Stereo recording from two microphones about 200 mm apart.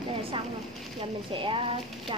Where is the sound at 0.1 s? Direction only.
25° right (ahead or behind).